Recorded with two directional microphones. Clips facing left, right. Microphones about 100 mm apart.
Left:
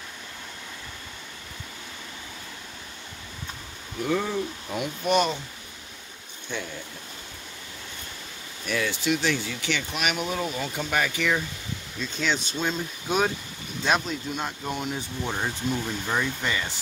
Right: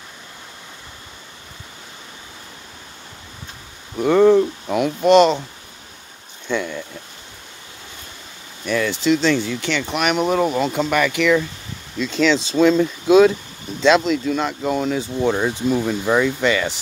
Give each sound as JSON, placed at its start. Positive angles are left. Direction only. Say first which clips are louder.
{"t": 4.0, "sound": "speech", "louder": "right 14 dB", "side_deg": -70}
{"t": 6.5, "sound": "speech", "louder": "right 11 dB", "side_deg": -70}
{"t": 8.7, "sound": "speech", "louder": "right 8 dB", "side_deg": -75}